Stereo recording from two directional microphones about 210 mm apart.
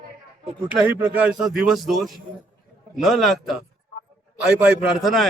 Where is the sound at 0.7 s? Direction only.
5° right (ahead or behind).